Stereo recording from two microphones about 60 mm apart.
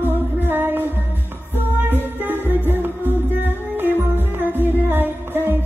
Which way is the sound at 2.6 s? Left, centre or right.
Right.